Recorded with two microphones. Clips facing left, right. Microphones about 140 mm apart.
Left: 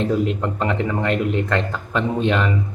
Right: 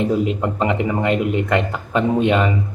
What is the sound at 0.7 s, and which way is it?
A man's voice, 15° right (ahead or behind).